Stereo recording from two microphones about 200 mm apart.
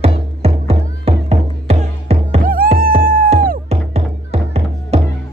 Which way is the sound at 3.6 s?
30° right (ahead or behind).